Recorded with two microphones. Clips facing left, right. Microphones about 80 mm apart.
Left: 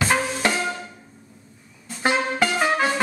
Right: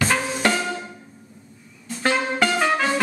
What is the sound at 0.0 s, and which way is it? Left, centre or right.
Music, centre.